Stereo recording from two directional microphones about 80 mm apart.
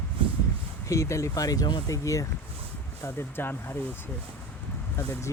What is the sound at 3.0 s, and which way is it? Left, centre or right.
Speech, left.